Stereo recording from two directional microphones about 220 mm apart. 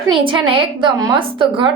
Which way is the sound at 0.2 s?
20° right (ahead or behind).